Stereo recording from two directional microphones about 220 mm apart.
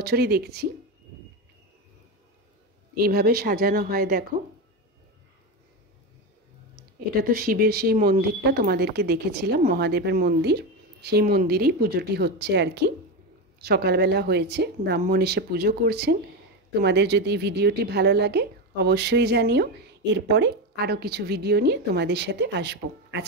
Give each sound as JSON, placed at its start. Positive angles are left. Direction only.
{"t": 0.0, "sound": "speech", "side_deg": -45}
{"t": 3.0, "sound": "speech", "side_deg": -45}
{"t": 7.2, "sound": "speech", "side_deg": -40}